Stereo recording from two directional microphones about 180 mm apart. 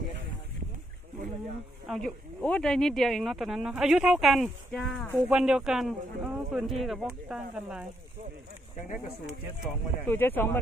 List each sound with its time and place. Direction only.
1.9 s speech: centre (ahead or behind)
5.3 s speech: 5° right (ahead or behind)
8.7 s speech: 45° left (ahead or behind)
10.0 s speech: 10° left (ahead or behind)